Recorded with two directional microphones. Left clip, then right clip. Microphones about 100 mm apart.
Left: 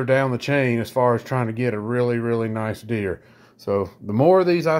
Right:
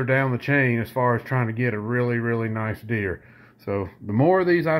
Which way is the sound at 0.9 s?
35° left (ahead or behind).